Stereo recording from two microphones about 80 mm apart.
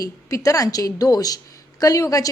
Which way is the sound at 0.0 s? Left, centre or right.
Left.